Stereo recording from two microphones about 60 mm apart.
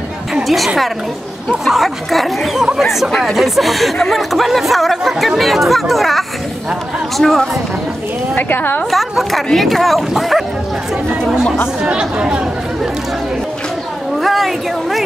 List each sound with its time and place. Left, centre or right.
0.3 s a sound: centre
1.6 s speech: centre
3.1 s speech: centre
8.4 s a woman's voice: left
8.9 s speech: centre
11.8 s speech: centre
14.2 s a woman's voice: centre